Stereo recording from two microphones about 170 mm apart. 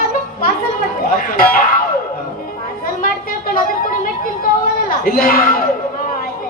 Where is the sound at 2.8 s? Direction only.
60° left (ahead or behind).